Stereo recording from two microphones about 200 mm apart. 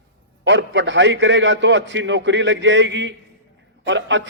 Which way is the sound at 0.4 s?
65° right (ahead or behind).